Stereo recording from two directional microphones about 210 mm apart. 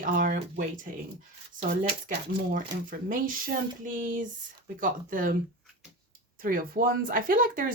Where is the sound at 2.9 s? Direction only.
40° right (ahead or behind).